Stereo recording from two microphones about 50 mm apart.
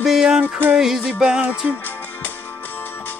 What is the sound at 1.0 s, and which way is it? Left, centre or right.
Music, centre.